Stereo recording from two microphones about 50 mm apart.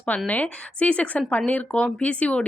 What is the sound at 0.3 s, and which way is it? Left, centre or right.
Speech, left.